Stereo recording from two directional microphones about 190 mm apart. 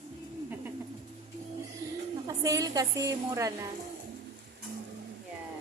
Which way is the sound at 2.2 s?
20° right (ahead or behind).